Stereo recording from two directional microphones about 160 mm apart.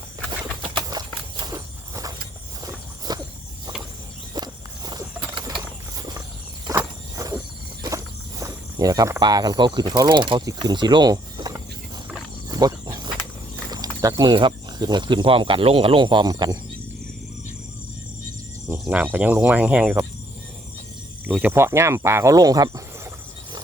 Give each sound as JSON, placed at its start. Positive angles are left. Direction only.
{"t": 0.3, "sound": "a sound", "side_deg": -25}
{"t": 3.1, "sound": "walk", "side_deg": -25}
{"t": 4.4, "sound": "walk", "side_deg": -25}
{"t": 4.9, "sound": "horse", "side_deg": -25}
{"t": 6.7, "sound": "walk", "side_deg": -20}
{"t": 7.8, "sound": "speech", "side_deg": -20}
{"t": 12.5, "sound": "wild animals", "side_deg": -25}
{"t": 13.7, "sound": "speech", "side_deg": -25}
{"t": 18.7, "sound": "speech", "side_deg": -10}
{"t": 21.3, "sound": "speech", "side_deg": -15}